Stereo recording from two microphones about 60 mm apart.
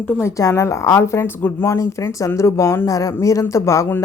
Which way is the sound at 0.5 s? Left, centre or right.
Left.